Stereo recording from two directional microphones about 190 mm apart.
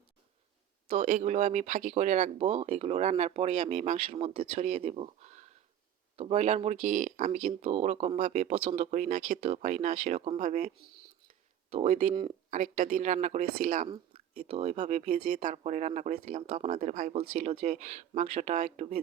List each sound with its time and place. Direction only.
0.9 s speech: 40° right (ahead or behind)
11.7 s speech: 35° right (ahead or behind)
13.8 s speech: 30° right (ahead or behind)